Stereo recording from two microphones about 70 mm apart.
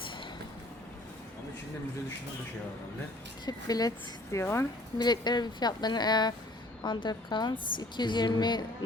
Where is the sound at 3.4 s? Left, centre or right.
Left.